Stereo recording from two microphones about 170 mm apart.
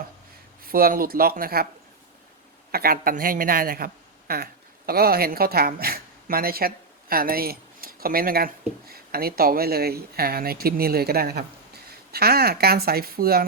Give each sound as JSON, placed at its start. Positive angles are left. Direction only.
{"t": 0.6, "sound": "a woman's voice", "side_deg": -60}
{"t": 2.7, "sound": "a woman's voice", "side_deg": -60}